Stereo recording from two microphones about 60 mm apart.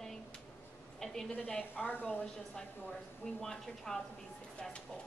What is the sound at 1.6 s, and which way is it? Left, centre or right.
Speech, left.